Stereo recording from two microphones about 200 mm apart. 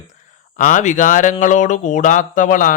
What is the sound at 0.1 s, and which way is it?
Speech, 40° left (ahead or behind).